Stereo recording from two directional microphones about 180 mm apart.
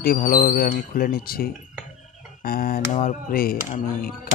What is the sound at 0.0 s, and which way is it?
Speech, 55° left (ahead or behind).